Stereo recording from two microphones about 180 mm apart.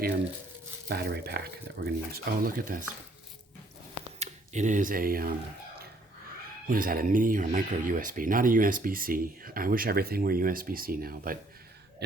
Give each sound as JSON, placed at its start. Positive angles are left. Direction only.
{"t": 0.9, "sound": "speech", "side_deg": -65}
{"t": 4.2, "sound": "speech", "side_deg": -40}
{"t": 6.7, "sound": "speech", "side_deg": -50}